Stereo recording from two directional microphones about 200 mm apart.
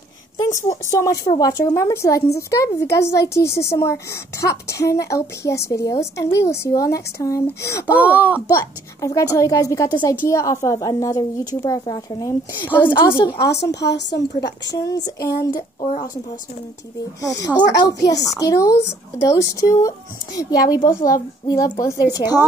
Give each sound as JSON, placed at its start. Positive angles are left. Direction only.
{"t": 0.9, "sound": "a woman's voice", "side_deg": 15}
{"t": 7.8, "sound": "speech", "side_deg": -10}
{"t": 8.5, "sound": "a woman's voice", "side_deg": 15}
{"t": 13.7, "sound": "a woman's voice", "side_deg": 60}
{"t": 15.0, "sound": "a woman's voice", "side_deg": 15}
{"t": 15.8, "sound": "a woman's voice", "side_deg": 35}
{"t": 17.5, "sound": "a woman's voice", "side_deg": 20}